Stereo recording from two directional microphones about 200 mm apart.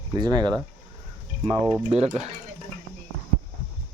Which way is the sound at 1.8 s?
35° right (ahead or behind).